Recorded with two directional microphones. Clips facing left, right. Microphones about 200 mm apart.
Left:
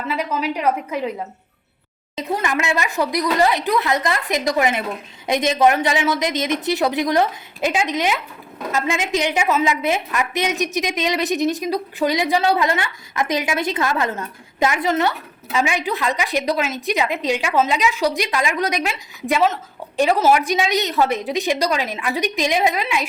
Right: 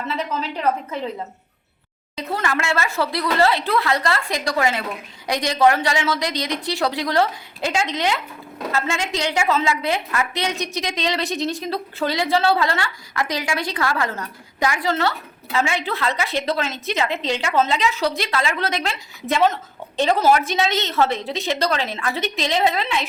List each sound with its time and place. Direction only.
0.1 s a woman's voice: 10° left (ahead or behind)
2.1 s a woman's voice: 15° left (ahead or behind)